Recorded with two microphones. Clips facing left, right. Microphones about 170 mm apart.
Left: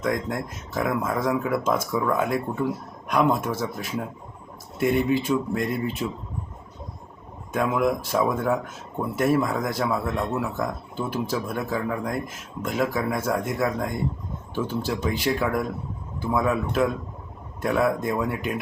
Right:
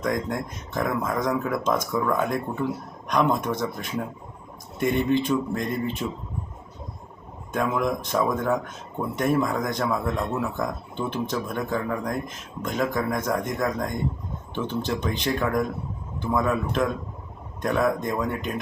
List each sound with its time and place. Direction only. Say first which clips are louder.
0.0 s speech: even; 5° left (ahead or behind)
7.5 s speech: left 2 dB; 5° left (ahead or behind)